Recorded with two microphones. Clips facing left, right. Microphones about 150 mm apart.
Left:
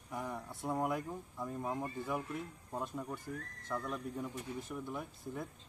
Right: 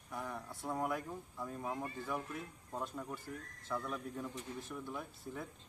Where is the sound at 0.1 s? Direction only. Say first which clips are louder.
Left 2 dB; 15° left (ahead or behind).